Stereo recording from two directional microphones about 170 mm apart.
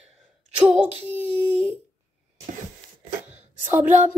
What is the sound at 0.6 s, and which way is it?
Female singing, 35° right (ahead or behind).